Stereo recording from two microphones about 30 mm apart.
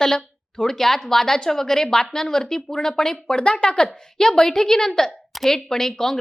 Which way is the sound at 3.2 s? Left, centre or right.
Left.